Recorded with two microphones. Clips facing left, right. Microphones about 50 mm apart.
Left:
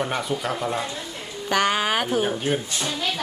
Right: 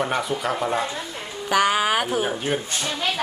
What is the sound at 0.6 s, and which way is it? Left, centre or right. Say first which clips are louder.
Speech: right 3 dB; centre.